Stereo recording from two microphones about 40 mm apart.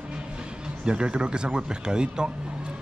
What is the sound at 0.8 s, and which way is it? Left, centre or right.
A man's voice, right.